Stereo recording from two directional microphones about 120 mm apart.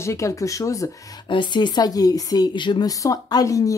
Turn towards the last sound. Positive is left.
turn(degrees=30)  # may be behind; listen again after turning